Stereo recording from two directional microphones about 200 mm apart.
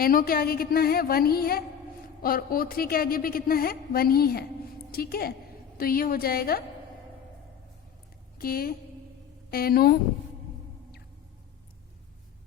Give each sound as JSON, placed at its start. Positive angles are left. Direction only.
{"t": 0.0, "sound": "a woman's voice", "side_deg": 45}
{"t": 8.4, "sound": "a woman's voice", "side_deg": 45}